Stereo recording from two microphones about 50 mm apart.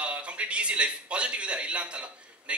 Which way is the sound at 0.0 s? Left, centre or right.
Right.